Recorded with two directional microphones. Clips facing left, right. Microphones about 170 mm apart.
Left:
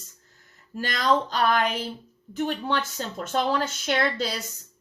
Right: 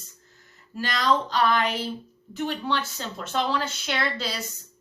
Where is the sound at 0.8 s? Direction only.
45° left (ahead or behind).